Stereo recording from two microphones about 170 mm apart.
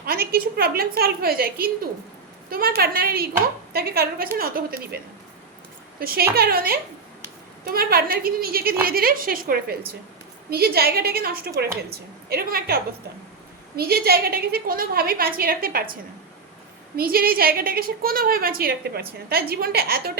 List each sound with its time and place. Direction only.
0.0 s a woman's voice: 60° right (ahead or behind)
6.0 s a woman's voice: 60° right (ahead or behind)
17.0 s a woman's voice: 60° right (ahead or behind)